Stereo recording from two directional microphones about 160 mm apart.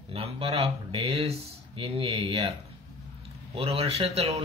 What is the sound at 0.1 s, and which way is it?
Speech, 35° right (ahead or behind).